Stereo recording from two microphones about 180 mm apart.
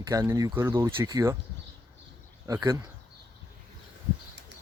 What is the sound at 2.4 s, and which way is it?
Speech, 20° right (ahead or behind).